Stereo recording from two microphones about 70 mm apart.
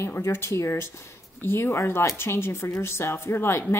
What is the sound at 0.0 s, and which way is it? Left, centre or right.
Speech, left.